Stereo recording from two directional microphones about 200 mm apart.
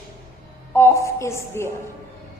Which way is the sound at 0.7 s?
15° left (ahead or behind).